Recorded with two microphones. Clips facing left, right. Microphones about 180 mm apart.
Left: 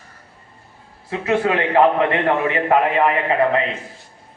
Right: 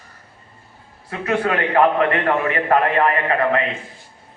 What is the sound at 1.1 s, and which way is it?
A man's voice, 20° left (ahead or behind).